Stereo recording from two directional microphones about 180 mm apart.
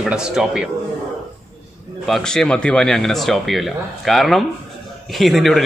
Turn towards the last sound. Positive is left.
turn(degrees=0)  # may be behind; listen again after turning